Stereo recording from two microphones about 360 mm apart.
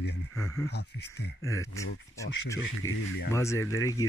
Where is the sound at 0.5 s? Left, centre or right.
Left.